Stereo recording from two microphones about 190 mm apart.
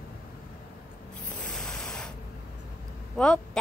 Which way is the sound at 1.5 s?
Centre (ahead or behind).